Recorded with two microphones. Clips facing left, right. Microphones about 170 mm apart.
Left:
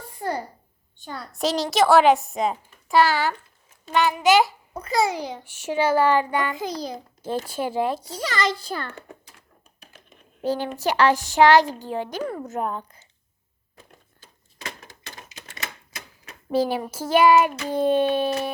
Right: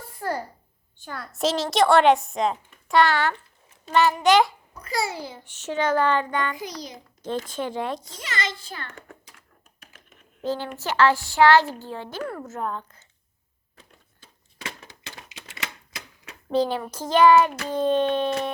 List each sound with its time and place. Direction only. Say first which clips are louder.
1.3 s a child's voice: even; centre (ahead or behind)
4.8 s a woman's voice: left 5 dB; 20° left (ahead or behind)
6.5 s a child's voice: left 5 dB; 25° left (ahead or behind)
7.2 s a woman's voice: left 1 dB; 10° left (ahead or behind)
8.0 s a child's voice: left 6 dB; 35° left (ahead or behind)
10.4 s a woman's voice: left 4 dB; 15° left (ahead or behind)
14.8 s typewriter: even; 45° left (ahead or behind)
16.5 s a woman's voice: left 1 dB; 10° left (ahead or behind)